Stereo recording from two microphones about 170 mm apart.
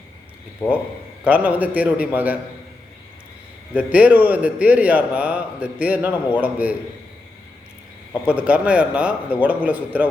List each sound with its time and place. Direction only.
0.6 s a man's voice: 15° left (ahead or behind)
1.2 s a man's voice: 10° right (ahead or behind)
3.8 s a man's voice: 10° right (ahead or behind)
8.3 s a man's voice: 5° right (ahead or behind)